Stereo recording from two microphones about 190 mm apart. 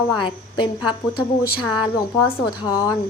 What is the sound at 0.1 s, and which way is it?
A woman's voice, 25° left (ahead or behind).